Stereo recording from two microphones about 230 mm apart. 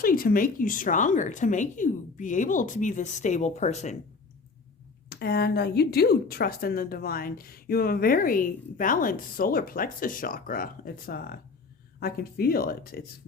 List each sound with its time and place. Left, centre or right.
0.0 s speech: left
5.0 s speech: left